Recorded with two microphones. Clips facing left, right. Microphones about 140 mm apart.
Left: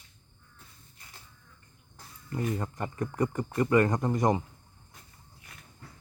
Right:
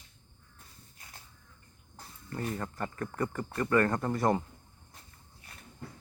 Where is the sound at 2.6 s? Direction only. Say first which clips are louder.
Left 3 dB; 15° left (ahead or behind).